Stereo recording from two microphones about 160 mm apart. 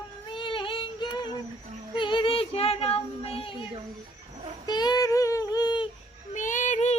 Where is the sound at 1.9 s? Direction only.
30° left (ahead or behind).